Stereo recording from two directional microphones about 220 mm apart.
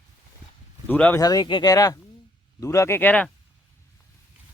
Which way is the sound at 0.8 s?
5° left (ahead or behind).